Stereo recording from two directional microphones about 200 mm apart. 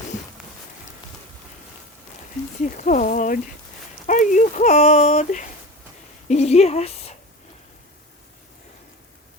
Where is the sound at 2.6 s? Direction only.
40° left (ahead or behind).